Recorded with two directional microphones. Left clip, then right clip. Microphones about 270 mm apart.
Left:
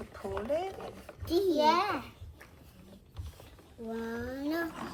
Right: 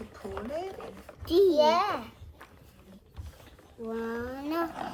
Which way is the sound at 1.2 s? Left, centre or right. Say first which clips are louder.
Right 5 dB; right.